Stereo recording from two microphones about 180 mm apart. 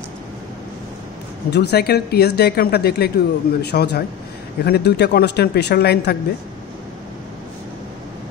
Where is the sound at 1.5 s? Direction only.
65° left (ahead or behind).